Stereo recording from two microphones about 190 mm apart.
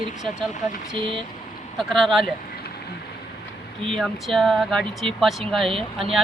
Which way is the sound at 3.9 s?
Centre (ahead or behind).